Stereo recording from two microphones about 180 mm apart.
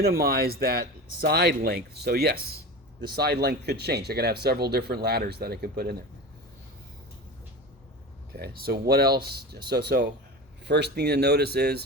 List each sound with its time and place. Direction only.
0.0 s speech: 55° right (ahead or behind)
8.3 s speech: 60° right (ahead or behind)